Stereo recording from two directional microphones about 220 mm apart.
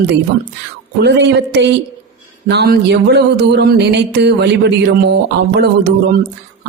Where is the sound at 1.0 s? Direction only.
50° right (ahead or behind).